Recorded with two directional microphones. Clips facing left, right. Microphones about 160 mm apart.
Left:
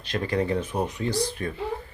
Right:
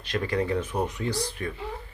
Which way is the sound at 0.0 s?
30° left (ahead or behind).